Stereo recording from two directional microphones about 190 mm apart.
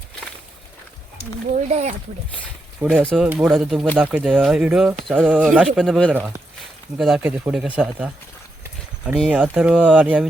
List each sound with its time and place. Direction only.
1.5 s speech: 35° right (ahead or behind)
2.8 s speech: 5° right (ahead or behind)
6.1 s speech: 10° right (ahead or behind)
9.3 s speech: 5° right (ahead or behind)